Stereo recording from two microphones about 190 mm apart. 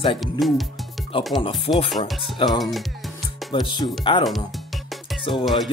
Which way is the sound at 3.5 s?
25° left (ahead or behind).